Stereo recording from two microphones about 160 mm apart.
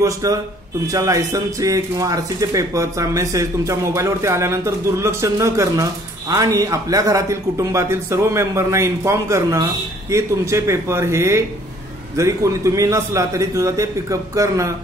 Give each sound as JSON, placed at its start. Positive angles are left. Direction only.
{"t": 0.0, "sound": "speech", "side_deg": -20}